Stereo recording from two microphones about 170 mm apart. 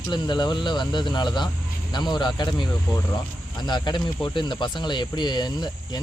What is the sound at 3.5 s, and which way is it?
Speech, 25° left (ahead or behind).